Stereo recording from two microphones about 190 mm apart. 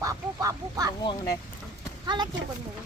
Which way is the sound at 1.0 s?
25° left (ahead or behind).